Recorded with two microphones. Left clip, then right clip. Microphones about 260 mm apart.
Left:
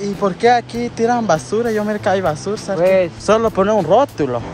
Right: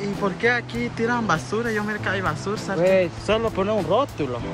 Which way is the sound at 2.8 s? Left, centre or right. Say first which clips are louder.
Left 5 dB; left.